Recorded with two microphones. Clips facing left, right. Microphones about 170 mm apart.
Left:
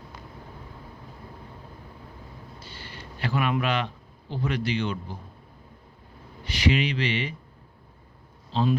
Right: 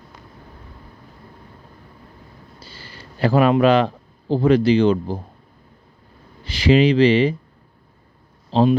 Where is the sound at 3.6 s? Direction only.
35° right (ahead or behind).